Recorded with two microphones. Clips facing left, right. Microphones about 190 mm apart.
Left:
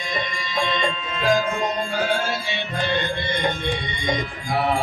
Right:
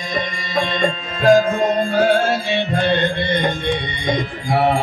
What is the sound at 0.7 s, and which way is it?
Music, 45° right (ahead or behind).